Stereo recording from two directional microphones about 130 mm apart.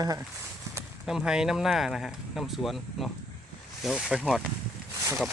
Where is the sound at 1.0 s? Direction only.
5° right (ahead or behind).